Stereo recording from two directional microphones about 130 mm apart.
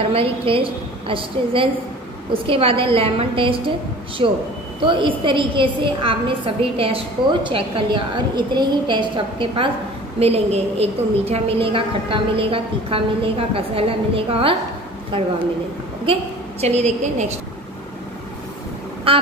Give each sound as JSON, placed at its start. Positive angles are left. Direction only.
{"t": 0.0, "sound": "a woman's voice", "side_deg": -45}
{"t": 10.1, "sound": "a woman's voice", "side_deg": -50}
{"t": 16.6, "sound": "a woman's voice", "side_deg": -60}
{"t": 19.1, "sound": "a woman's voice", "side_deg": -45}